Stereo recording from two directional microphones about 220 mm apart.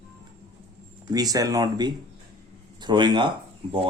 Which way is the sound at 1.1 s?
15° right (ahead or behind).